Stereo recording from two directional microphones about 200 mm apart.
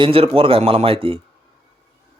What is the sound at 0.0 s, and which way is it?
Speech, 30° right (ahead or behind).